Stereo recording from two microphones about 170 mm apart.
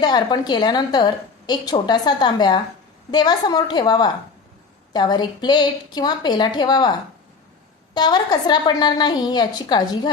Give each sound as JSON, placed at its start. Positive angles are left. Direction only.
{"t": 0.0, "sound": "a woman's voice", "side_deg": 25}
{"t": 7.9, "sound": "a woman's voice", "side_deg": 25}